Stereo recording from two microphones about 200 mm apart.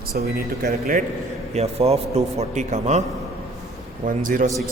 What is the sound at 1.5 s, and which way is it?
A man's voice, 30° right (ahead or behind).